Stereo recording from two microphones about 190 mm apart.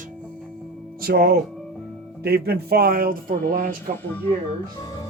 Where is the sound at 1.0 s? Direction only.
50° right (ahead or behind).